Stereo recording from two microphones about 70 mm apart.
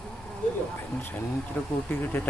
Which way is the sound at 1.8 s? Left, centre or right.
Left.